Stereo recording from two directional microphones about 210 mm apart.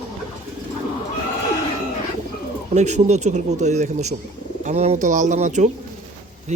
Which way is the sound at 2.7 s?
35° right (ahead or behind).